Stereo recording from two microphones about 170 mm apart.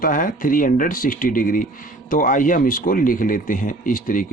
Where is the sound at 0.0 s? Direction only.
55° left (ahead or behind).